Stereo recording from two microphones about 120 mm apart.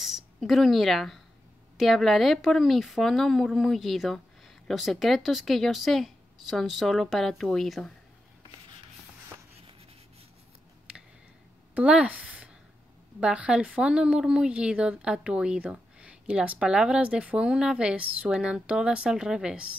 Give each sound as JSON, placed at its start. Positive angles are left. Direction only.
{"t": 0.0, "sound": "a woman's voice", "side_deg": 0}
{"t": 11.7, "sound": "a woman's voice", "side_deg": -10}